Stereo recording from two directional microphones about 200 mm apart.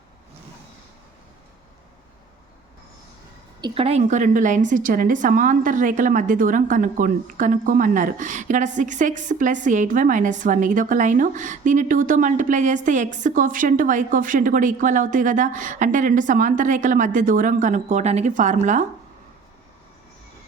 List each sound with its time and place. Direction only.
3.6 s a woman's voice: 30° right (ahead or behind)